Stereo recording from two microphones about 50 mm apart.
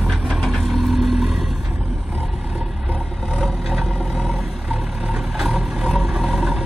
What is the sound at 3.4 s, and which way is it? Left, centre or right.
Vehicle, centre.